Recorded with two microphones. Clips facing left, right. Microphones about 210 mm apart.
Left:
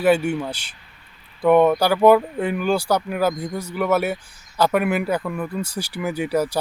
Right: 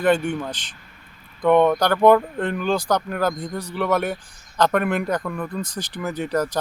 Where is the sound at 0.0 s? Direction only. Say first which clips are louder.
Left 2 dB; 10° left (ahead or behind).